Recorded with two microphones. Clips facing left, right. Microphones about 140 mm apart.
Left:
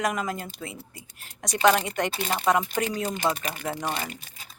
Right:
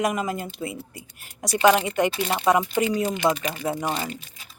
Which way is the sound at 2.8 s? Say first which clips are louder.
Right 5 dB; 40° left (ahead or behind).